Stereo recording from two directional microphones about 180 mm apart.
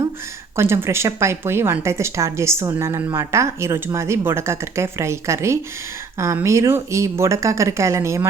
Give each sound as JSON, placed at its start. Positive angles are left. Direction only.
{"t": 0.5, "sound": "speech", "side_deg": -15}